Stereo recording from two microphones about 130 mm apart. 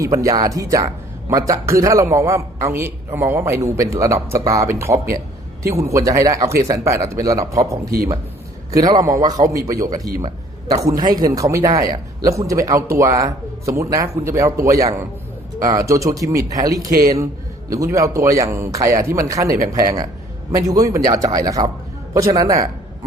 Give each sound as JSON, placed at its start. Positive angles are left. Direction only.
{"t": 0.0, "sound": "a man's voice", "side_deg": -25}